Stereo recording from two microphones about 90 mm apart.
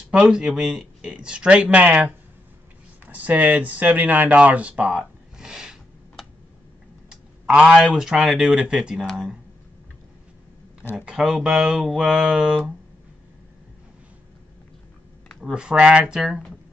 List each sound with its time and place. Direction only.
0.1 s speech: 5° right (ahead or behind)
11.0 s speech: 5° right (ahead or behind)
15.4 s speech: 10° right (ahead or behind)